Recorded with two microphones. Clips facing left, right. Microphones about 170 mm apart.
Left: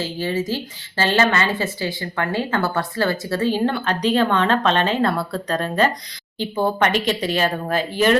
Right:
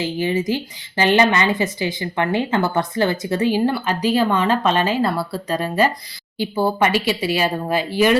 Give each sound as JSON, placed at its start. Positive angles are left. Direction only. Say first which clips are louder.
{"t": 0.0, "sound": "speech", "louder": "right 3 dB", "side_deg": -15}